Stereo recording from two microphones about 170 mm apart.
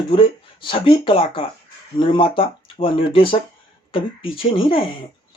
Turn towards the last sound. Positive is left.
turn(degrees=35)  # may be behind; listen again after turning